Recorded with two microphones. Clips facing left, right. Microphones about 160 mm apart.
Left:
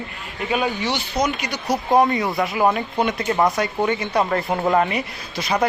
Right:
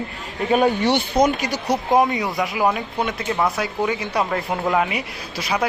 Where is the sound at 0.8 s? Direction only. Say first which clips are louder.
Right 5 dB; 60° right (ahead or behind); by 1.6 s 40° right (ahead or behind).